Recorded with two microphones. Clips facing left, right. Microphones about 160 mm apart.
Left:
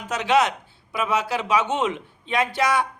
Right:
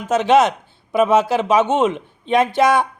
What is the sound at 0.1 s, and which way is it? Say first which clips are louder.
Speech: right 6 dB; 20° right (ahead or behind).